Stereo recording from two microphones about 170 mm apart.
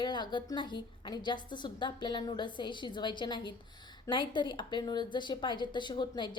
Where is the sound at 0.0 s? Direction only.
25° left (ahead or behind).